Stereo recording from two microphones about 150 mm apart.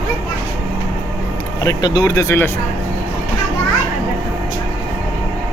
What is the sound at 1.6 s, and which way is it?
Speech, 25° left (ahead or behind).